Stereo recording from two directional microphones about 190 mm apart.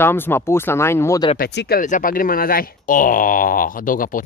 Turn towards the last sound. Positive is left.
turn(degrees=45)  # may be behind; listen again after turning